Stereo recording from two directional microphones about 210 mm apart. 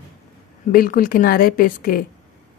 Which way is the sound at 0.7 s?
40° left (ahead or behind).